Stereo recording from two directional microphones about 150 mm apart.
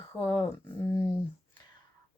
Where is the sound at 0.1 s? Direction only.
20° left (ahead or behind).